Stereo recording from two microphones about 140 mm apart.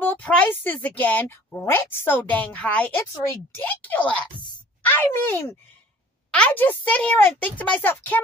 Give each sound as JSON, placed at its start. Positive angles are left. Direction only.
{"t": 0.0, "sound": "speech", "side_deg": 10}